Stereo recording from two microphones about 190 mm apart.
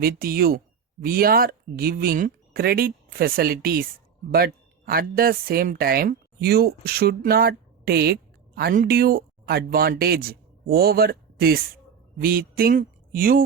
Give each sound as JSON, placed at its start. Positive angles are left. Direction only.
{"t": 0.0, "sound": "speech", "side_deg": -50}